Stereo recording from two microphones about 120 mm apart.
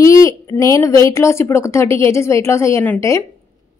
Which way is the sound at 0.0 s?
25° left (ahead or behind).